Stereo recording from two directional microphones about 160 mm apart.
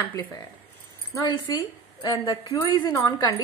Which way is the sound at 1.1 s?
25° left (ahead or behind).